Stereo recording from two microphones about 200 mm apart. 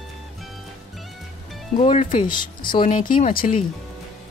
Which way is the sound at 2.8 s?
40° left (ahead or behind).